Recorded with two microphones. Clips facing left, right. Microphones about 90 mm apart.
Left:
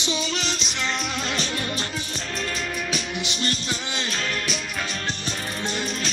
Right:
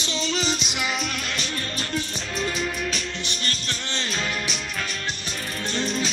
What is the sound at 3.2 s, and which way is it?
Music, 20° left (ahead or behind).